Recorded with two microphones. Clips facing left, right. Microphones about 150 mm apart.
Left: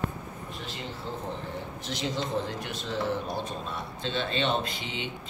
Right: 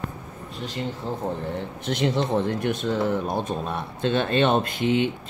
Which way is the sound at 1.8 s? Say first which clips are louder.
Right 9 dB; 60° right (ahead or behind).